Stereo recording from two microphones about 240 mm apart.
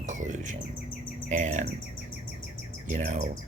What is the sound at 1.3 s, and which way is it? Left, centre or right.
Bird, right.